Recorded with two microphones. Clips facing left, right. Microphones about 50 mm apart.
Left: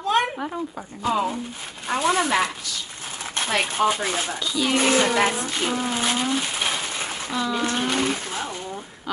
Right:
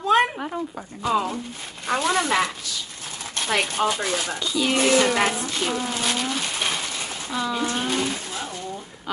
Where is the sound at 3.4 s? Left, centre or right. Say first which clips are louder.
Left 1 dB; centre.